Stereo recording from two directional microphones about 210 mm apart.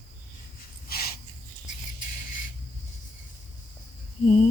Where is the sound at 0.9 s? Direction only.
45° left (ahead or behind).